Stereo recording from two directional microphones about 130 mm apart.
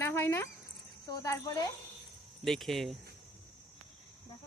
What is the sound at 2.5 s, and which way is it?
Speech, centre (ahead or behind).